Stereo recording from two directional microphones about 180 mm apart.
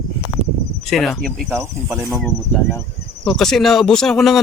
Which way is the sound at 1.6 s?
15° right (ahead or behind).